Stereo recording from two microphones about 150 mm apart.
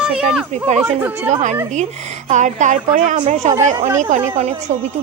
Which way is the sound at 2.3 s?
55° right (ahead or behind).